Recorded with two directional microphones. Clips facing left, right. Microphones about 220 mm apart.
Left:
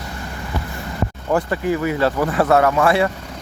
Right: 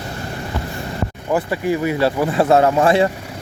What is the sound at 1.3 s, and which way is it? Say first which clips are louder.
Speech: even; 5° right (ahead or behind).